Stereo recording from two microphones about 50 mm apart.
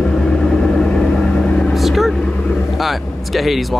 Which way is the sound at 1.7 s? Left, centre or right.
Centre.